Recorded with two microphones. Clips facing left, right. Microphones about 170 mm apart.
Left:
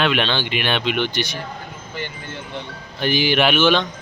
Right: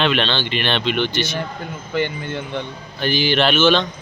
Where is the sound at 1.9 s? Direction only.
65° right (ahead or behind).